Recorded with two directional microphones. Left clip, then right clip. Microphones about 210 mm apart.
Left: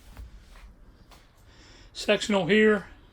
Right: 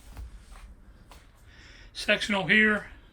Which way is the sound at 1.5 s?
10° left (ahead or behind).